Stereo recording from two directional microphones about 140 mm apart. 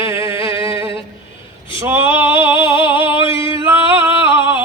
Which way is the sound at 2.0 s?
35° left (ahead or behind).